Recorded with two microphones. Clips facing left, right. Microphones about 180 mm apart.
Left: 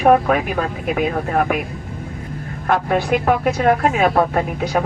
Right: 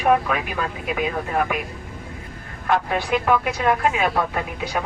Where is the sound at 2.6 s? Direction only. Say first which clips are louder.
Left 4 dB; 50° left (ahead or behind).